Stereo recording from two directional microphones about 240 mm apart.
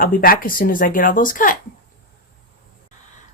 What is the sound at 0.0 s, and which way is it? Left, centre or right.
A woman's voice, left.